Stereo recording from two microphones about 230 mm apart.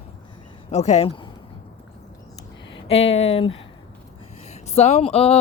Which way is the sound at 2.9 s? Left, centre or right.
Left.